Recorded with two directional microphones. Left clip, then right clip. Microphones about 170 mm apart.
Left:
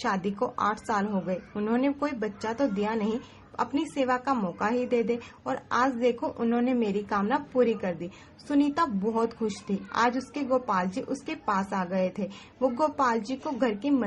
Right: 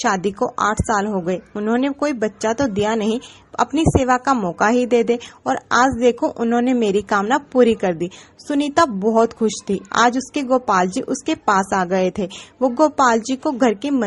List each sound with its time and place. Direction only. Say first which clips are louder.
0.0 s a woman's voice: right 9 dB; 40° right (ahead or behind)